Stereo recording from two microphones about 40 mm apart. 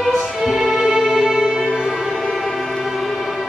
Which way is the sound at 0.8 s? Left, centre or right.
Centre.